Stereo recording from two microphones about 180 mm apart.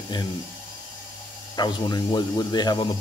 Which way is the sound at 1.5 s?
25° left (ahead or behind).